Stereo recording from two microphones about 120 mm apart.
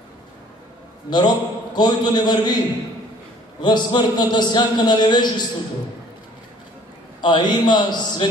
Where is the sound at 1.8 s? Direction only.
35° left (ahead or behind).